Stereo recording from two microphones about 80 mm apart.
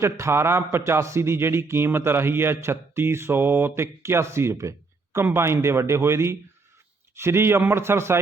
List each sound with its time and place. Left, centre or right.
0.0 s speech: right